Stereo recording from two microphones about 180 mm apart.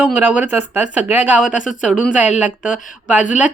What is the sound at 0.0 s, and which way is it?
Speech, 10° right (ahead or behind).